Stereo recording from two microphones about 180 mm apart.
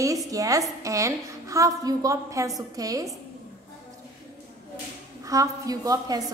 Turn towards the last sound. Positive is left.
turn(degrees=-20)  # may be behind; listen again after turning